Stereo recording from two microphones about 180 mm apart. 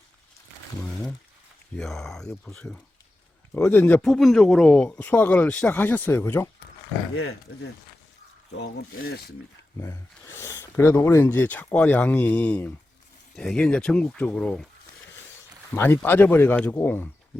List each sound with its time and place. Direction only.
0.8 s speech: 15° left (ahead or behind)
1.7 s speech: centre (ahead or behind)
8.5 s speech: 60° left (ahead or behind)
9.8 s speech: 15° left (ahead or behind)
15.7 s speech: 10° left (ahead or behind)